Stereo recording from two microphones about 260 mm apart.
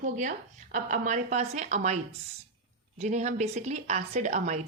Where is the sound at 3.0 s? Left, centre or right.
Right.